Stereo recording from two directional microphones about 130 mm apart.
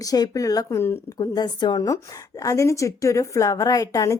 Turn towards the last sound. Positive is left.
turn(degrees=25)  # may be behind; listen again after turning